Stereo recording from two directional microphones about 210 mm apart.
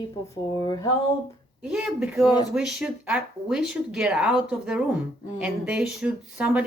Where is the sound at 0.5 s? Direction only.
20° left (ahead or behind).